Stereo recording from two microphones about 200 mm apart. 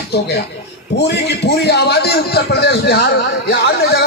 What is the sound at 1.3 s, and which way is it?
Speech, 55° left (ahead or behind).